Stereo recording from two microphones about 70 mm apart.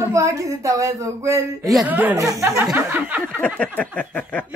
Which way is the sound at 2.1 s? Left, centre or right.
Right.